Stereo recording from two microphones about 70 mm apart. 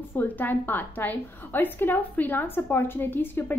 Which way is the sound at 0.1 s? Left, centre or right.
Left.